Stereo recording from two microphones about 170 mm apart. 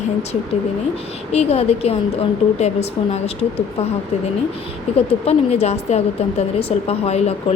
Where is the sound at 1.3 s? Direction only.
35° left (ahead or behind).